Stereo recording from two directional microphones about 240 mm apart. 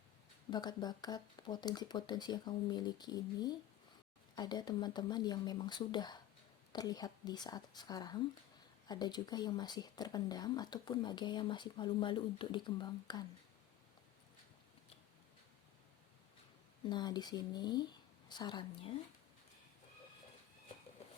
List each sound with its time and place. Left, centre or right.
0.5 s speech: centre
16.9 s speech: centre